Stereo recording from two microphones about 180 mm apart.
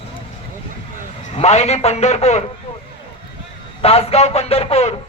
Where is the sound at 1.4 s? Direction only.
35° left (ahead or behind).